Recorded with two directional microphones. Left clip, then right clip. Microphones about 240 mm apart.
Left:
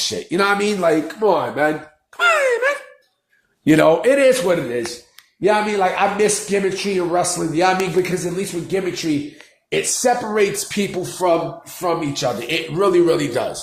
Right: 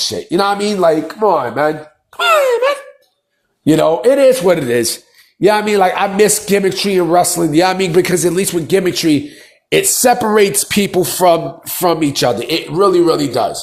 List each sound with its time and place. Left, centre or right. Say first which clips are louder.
0.0 s a man's voice: right 4 dB; centre
4.4 s a man's voice: right 7 dB; right
12.5 s speech: right 5 dB; centre